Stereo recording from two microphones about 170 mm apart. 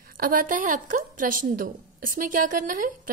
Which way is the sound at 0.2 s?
55° right (ahead or behind).